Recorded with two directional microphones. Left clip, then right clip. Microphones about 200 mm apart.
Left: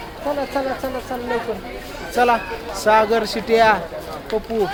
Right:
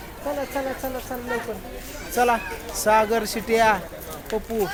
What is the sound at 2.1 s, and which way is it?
Speech, 25° right (ahead or behind).